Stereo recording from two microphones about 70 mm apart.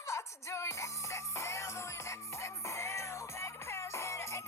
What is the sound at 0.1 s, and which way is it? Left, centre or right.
Music, left.